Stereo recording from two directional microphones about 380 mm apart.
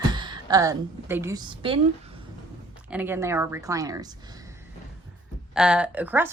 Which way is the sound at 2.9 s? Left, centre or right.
Centre.